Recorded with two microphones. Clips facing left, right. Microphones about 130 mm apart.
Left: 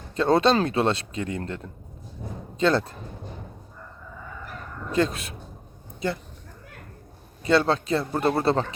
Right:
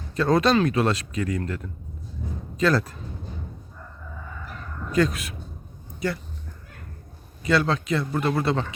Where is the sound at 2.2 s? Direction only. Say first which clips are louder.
Right 2 dB; 70° left (ahead or behind).